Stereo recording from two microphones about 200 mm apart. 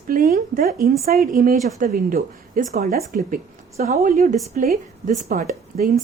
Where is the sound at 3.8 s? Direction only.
35° right (ahead or behind).